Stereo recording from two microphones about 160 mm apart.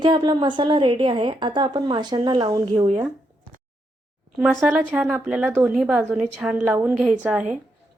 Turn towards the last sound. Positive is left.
turn(degrees=-5)  # may be behind; listen again after turning